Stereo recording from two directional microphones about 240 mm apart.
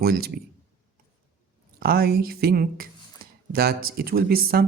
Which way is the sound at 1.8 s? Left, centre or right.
Right.